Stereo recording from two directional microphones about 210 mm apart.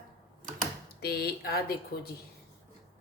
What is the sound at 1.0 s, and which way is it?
Speech, 50° left (ahead or behind).